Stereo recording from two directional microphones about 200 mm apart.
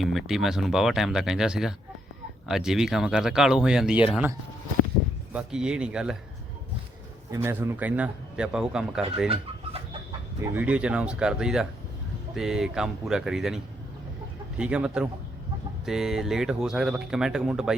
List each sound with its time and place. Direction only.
0.0 s speech: centre (ahead or behind)
5.3 s speech: 5° right (ahead or behind)
7.3 s speech: 15° right (ahead or behind)
9.3 s chicken: 30° right (ahead or behind)
10.4 s speech: 10° right (ahead or behind)
14.6 s speech: 5° right (ahead or behind)